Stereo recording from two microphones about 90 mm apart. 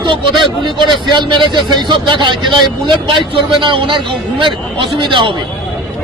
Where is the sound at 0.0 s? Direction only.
65° right (ahead or behind).